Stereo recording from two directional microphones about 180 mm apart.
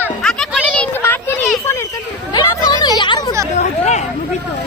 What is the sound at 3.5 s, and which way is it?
Speech, 40° left (ahead or behind).